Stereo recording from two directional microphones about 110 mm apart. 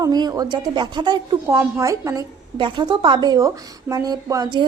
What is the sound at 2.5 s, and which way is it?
A woman's voice, 45° right (ahead or behind).